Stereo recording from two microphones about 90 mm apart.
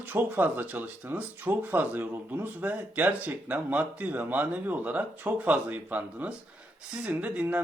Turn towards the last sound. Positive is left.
turn(degrees=-20)  # may be behind; listen again after turning